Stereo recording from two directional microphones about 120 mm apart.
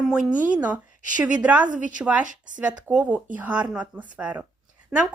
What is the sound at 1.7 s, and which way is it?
Speech, 90° right.